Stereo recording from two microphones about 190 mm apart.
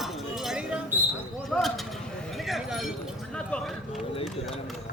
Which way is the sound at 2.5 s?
Centre (ahead or behind).